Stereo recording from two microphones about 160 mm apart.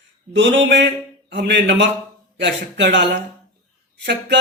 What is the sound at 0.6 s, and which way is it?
Speech, 90° right.